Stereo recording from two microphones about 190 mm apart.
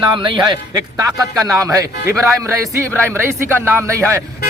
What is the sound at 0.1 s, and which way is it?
A man's voice, 25° right (ahead or behind).